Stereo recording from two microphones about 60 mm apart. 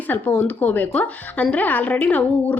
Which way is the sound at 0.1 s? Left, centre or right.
Left.